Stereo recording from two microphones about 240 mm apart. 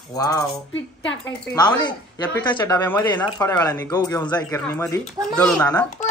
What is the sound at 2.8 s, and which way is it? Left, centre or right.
A child's voice, centre.